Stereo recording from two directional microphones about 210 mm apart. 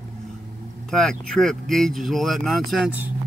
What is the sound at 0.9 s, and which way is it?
Speech, 5° left (ahead or behind).